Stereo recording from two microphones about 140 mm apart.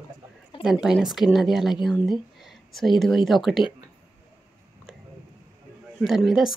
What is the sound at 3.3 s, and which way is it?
Speech, centre (ahead or behind).